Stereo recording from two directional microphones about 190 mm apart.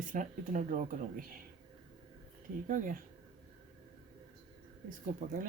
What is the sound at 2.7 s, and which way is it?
Speech, 45° right (ahead or behind).